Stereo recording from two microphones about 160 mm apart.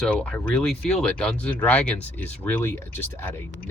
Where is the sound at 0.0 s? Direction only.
5° left (ahead or behind).